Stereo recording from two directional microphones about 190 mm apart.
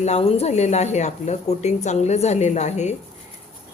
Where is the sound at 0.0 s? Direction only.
35° left (ahead or behind).